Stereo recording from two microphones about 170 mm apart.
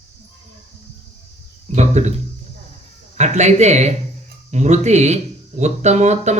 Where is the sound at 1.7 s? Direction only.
40° right (ahead or behind).